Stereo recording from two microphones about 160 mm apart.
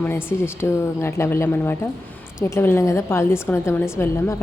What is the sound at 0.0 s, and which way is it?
A woman's voice, 15° left (ahead or behind).